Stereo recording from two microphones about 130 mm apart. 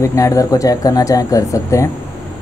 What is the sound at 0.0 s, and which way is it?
Speech, 25° left (ahead or behind).